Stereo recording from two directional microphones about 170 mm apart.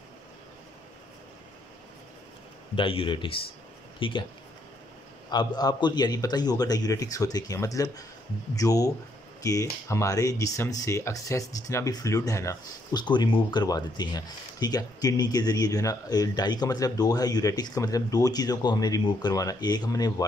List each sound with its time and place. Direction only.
2.7 s a man's voice: 30° left (ahead or behind)
5.3 s speech: 25° left (ahead or behind)